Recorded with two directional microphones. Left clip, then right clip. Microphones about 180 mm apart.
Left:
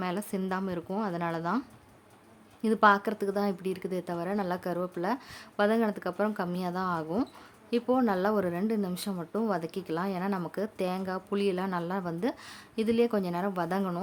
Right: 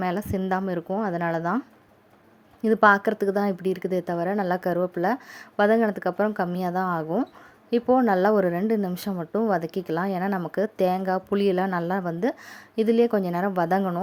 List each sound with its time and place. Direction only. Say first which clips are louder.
0.0 s a woman's voice: right 6 dB; 20° right (ahead or behind)
2.6 s a woman's voice: right 5 dB; 20° right (ahead or behind)